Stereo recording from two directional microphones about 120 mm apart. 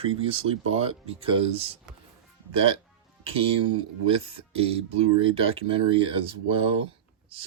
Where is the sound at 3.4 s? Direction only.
45° right (ahead or behind).